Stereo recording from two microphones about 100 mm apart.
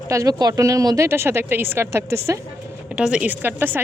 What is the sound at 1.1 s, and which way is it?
Speech, 25° right (ahead or behind).